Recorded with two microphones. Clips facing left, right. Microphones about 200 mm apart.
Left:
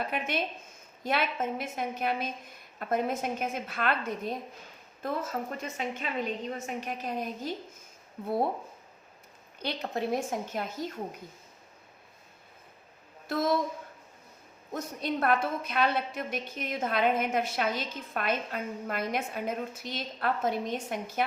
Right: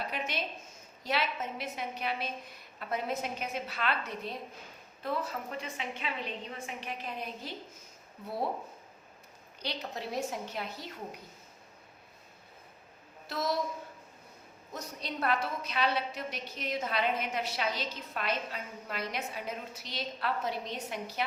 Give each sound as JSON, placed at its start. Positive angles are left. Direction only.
{"t": 0.1, "sound": "a woman's voice", "side_deg": 55}
{"t": 9.6, "sound": "a woman's voice", "side_deg": 55}
{"t": 13.2, "sound": "a woman's voice", "side_deg": 50}
{"t": 14.7, "sound": "a woman's voice", "side_deg": 50}